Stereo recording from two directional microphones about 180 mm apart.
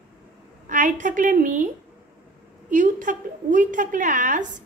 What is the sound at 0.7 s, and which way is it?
A woman's voice, 45° right (ahead or behind).